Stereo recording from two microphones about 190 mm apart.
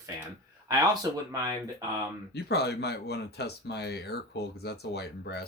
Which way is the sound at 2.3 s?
60° left (ahead or behind).